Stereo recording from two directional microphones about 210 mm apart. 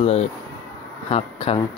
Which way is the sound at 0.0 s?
30° left (ahead or behind).